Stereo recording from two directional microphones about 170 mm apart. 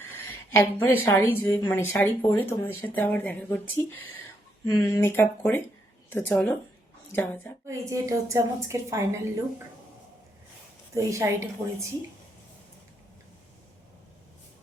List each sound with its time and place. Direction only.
0.3 s a woman's voice: 15° left (ahead or behind)
4.8 s speech: 15° left (ahead or behind)
7.7 s a woman's voice: 20° right (ahead or behind)
10.9 s a woman's voice: 15° right (ahead or behind)